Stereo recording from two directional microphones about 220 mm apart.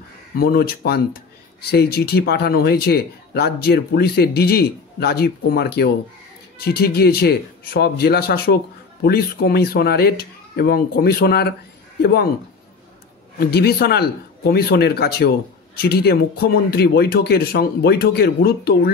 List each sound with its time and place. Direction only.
0.4 s speech: 45° left (ahead or behind)
13.5 s speech: 45° left (ahead or behind)